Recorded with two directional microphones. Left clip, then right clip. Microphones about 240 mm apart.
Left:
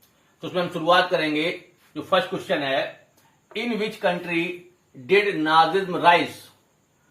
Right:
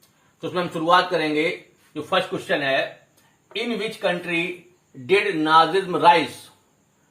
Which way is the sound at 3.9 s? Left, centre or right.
Centre.